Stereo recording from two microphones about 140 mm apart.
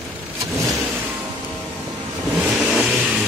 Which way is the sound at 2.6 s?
10° right (ahead or behind).